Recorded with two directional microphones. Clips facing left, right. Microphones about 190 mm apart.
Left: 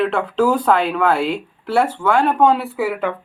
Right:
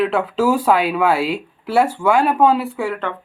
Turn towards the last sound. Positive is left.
turn(degrees=5)  # may be behind; listen again after turning